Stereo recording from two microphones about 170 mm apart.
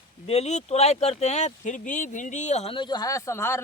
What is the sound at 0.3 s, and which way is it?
Speech, 40° left (ahead or behind).